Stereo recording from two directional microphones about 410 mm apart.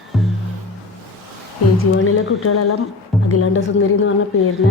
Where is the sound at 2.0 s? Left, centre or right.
Left.